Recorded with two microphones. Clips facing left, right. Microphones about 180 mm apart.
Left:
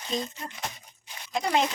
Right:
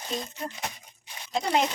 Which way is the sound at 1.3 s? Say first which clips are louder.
Even; 20° right (ahead or behind).